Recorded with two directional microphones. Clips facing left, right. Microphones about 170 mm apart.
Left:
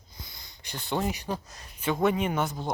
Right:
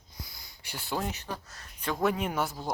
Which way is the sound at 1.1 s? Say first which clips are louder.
Left 5 dB; 15° left (ahead or behind).